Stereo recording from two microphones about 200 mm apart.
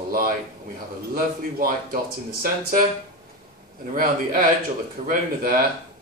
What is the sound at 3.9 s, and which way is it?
A man's voice, 45° right (ahead or behind).